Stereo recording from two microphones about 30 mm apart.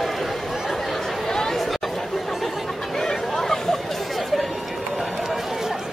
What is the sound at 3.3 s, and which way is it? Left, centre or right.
Hubbub, centre.